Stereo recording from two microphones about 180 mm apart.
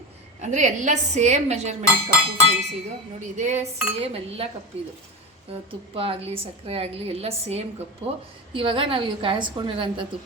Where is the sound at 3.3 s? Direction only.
40° right (ahead or behind).